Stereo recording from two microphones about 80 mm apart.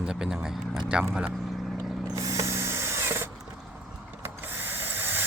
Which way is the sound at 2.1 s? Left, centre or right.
Right.